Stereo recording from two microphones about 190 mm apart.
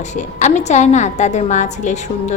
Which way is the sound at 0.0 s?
40° left (ahead or behind).